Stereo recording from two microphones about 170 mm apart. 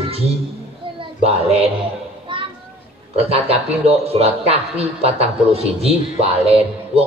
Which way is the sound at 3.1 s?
35° right (ahead or behind).